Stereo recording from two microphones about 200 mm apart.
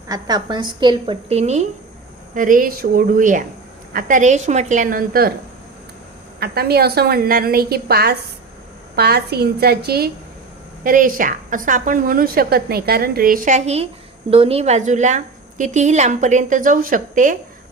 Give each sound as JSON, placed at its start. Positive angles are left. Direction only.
{"t": 0.1, "sound": "a woman's voice", "side_deg": -20}
{"t": 6.4, "sound": "a woman's voice", "side_deg": -50}